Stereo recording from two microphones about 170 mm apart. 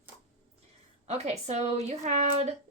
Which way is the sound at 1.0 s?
40° right (ahead or behind).